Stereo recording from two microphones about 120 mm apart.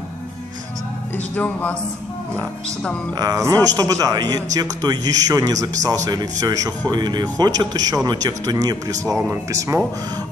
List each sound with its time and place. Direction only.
1.1 s speech: 15° left (ahead or behind)
3.2 s a man's voice: 30° right (ahead or behind)